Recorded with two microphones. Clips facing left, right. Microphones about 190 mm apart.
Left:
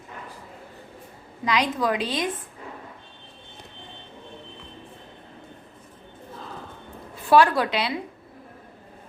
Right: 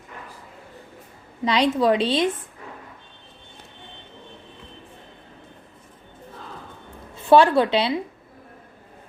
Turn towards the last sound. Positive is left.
turn(degrees=-30)  # may be behind; listen again after turning